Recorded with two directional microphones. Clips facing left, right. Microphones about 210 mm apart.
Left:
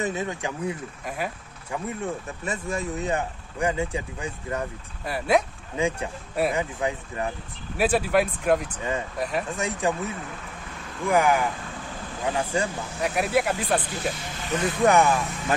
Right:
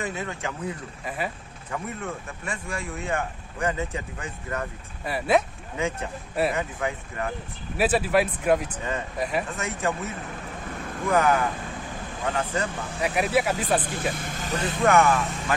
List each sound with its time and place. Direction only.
0.0 s speech: 20° left (ahead or behind)
1.0 s speech: centre (ahead or behind)
1.7 s speech: 15° left (ahead or behind)
5.0 s speech: 5° right (ahead or behind)
5.8 s speech: 15° left (ahead or behind)
7.7 s speech: 5° right (ahead or behind)
9.6 s speech: 15° left (ahead or behind)
13.0 s speech: 5° right (ahead or behind)
13.8 s speech: 55° right (ahead or behind)
14.9 s speech: 15° left (ahead or behind)